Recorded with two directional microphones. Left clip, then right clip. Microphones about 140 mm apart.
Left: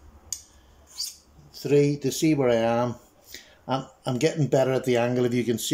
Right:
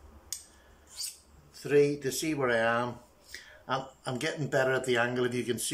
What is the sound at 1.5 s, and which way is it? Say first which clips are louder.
Speech: left 3 dB; 30° left (ahead or behind).